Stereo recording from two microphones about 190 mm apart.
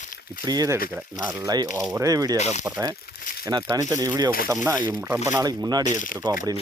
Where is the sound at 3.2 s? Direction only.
50° left (ahead or behind).